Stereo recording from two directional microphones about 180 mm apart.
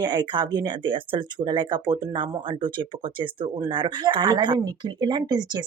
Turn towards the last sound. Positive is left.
turn(degrees=-25)  # may be behind; listen again after turning